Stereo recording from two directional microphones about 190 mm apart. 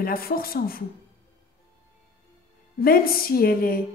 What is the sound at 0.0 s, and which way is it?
Speech, 50° left (ahead or behind).